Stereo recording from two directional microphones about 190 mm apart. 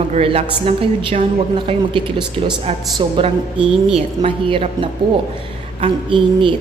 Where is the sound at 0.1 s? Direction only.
30° right (ahead or behind).